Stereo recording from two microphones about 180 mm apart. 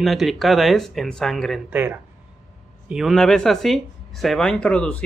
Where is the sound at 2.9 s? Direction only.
Centre (ahead or behind).